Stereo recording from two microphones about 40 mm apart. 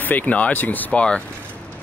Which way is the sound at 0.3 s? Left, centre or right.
Left.